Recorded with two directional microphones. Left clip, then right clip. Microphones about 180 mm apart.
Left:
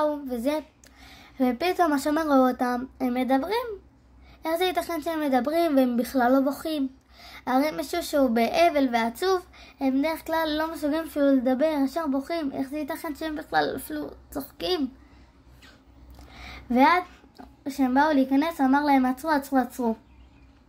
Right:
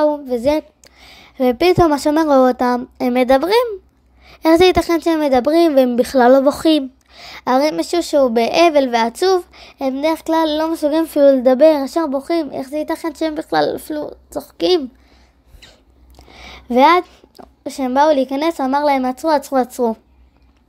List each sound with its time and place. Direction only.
0.0 s a woman's voice: 35° right (ahead or behind)
16.3 s a woman's voice: 30° right (ahead or behind)